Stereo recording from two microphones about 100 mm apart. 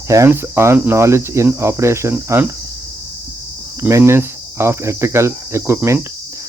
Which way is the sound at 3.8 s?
25° right (ahead or behind).